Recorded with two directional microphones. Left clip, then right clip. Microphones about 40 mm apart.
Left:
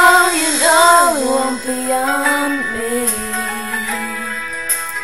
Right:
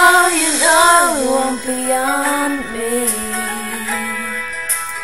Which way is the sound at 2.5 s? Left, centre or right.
Left.